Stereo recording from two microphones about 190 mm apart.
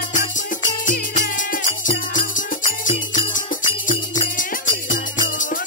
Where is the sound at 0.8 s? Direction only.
45° left (ahead or behind).